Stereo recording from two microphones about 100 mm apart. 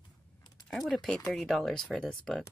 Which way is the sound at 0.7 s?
5° left (ahead or behind).